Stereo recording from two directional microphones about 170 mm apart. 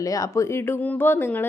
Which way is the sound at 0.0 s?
20° left (ahead or behind).